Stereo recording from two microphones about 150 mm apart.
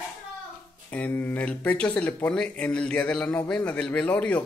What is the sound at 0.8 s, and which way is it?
Speech, 10° left (ahead or behind).